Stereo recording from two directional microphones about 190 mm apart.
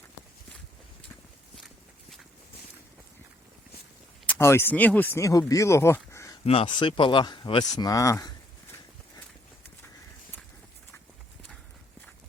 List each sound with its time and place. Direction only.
4.3 s speech: 15° left (ahead or behind)
6.4 s speech: 30° left (ahead or behind)